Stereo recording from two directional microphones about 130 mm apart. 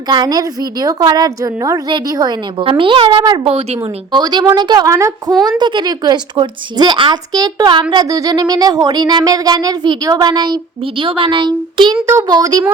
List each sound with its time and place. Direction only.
0.1 s speech: 30° right (ahead or behind)
3.5 s speech: 50° right (ahead or behind)
4.1 s speech: 35° right (ahead or behind)
5.5 s speech: 35° right (ahead or behind)